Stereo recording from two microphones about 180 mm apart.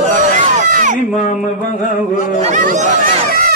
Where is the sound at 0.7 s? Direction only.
50° right (ahead or behind).